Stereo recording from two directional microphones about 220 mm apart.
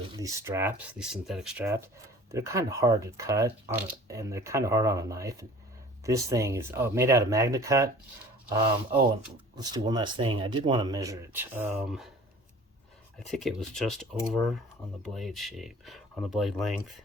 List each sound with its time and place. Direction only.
0.2 s speech: 10° right (ahead or behind)
9.6 s speech: 20° right (ahead or behind); by 12.1 s centre (ahead or behind)
13.1 s speech: centre (ahead or behind)